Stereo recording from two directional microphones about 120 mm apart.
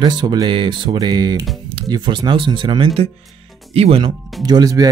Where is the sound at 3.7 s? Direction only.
55° right (ahead or behind).